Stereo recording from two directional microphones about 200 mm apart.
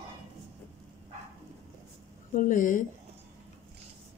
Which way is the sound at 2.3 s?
40° left (ahead or behind).